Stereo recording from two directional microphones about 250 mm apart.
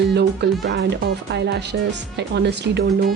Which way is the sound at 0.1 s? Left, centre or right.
Right.